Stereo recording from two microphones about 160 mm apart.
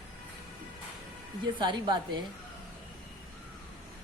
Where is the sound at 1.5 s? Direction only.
30° right (ahead or behind).